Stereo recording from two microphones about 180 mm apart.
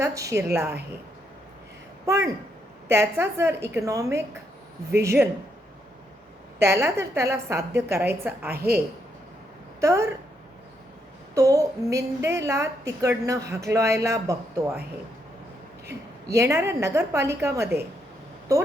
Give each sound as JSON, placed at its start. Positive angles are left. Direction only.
{"t": 0.0, "sound": "a woman's voice", "side_deg": -15}
{"t": 2.0, "sound": "a woman's voice", "side_deg": -15}
{"t": 6.6, "sound": "a woman's voice", "side_deg": -15}
{"t": 9.8, "sound": "a woman's voice", "side_deg": -15}
{"t": 11.3, "sound": "a woman's voice", "side_deg": -20}
{"t": 16.3, "sound": "a woman's voice", "side_deg": -15}